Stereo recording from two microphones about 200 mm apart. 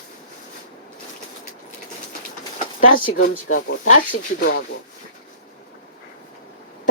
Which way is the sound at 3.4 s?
85° left.